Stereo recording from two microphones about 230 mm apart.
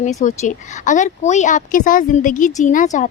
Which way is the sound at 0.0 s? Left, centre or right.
Left.